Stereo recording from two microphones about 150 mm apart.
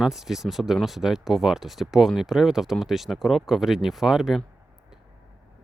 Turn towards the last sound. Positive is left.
turn(degrees=-5)  # may be behind; listen again after turning